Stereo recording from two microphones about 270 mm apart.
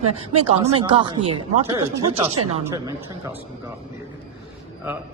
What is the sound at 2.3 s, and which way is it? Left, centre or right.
Speech, right.